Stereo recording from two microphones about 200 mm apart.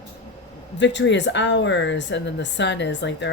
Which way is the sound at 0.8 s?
60° left (ahead or behind).